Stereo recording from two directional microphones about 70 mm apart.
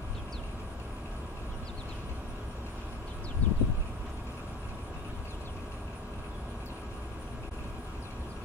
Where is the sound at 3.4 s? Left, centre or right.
Left.